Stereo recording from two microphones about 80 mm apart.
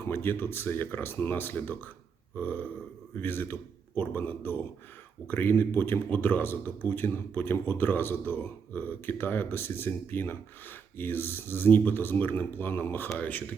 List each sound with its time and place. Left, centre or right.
0.0 s a man's voice: left